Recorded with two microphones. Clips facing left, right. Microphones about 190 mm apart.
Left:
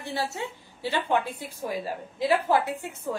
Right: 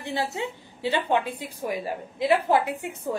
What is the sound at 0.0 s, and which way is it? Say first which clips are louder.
A woman's voice: right 2 dB; 15° right (ahead or behind).